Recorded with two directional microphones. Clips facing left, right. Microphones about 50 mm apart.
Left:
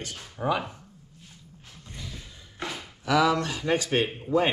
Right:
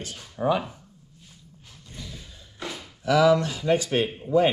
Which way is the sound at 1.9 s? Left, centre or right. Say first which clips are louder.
Even; left.